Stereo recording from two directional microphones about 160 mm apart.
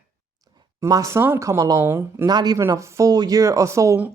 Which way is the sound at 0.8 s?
20° right (ahead or behind).